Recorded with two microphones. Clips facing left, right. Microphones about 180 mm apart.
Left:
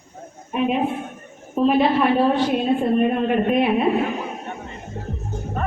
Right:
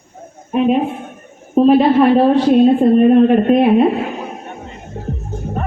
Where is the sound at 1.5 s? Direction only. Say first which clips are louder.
Right 7 dB; 35° right (ahead or behind).